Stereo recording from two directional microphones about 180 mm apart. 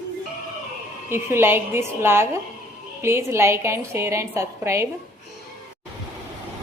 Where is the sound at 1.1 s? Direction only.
15° right (ahead or behind).